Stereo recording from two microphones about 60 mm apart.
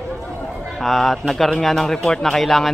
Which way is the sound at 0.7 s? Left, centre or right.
Centre.